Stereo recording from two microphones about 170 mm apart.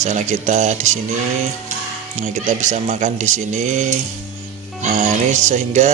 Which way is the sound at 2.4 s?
45° right (ahead or behind).